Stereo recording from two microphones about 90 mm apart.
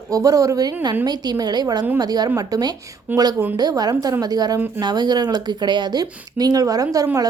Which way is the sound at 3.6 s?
50° right (ahead or behind).